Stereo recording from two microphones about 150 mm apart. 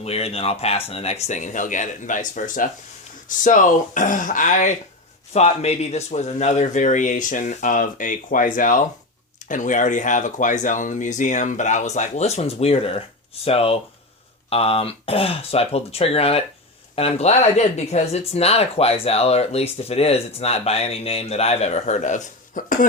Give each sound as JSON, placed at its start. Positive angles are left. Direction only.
{"t": 0.0, "sound": "speech", "side_deg": 45}
{"t": 5.3, "sound": "speech", "side_deg": 45}